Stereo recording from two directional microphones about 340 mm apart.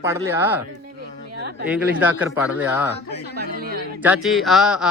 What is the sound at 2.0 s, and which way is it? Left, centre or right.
Speech, centre.